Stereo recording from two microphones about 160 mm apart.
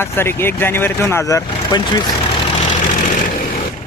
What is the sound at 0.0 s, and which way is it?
Speech, 15° left (ahead or behind).